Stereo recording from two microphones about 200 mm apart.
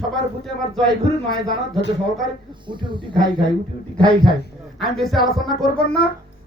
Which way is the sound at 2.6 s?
25° right (ahead or behind).